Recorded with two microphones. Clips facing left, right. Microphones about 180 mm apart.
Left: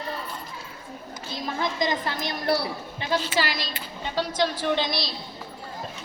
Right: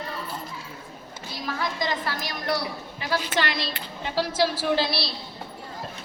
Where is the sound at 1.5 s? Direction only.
20° left (ahead or behind).